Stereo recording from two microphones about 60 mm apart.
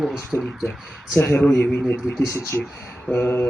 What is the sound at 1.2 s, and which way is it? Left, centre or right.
Mantra, left.